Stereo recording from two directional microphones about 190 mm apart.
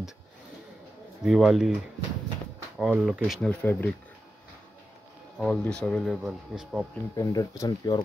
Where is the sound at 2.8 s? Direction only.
Centre (ahead or behind).